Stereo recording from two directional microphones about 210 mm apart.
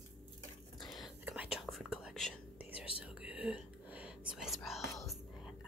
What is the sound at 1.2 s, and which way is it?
Whispering, 5° right (ahead or behind).